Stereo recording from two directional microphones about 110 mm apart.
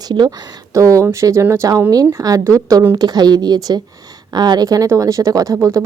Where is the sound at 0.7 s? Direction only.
30° right (ahead or behind).